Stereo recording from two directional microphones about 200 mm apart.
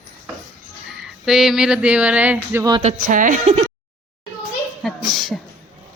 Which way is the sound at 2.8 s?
40° right (ahead or behind).